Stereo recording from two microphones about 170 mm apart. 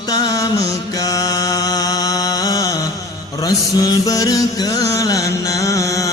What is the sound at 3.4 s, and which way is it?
Mantra, 20° left (ahead or behind).